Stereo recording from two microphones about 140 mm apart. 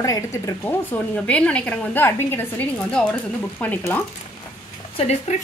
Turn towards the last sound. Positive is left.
turn(degrees=50)  # may be behind; listen again after turning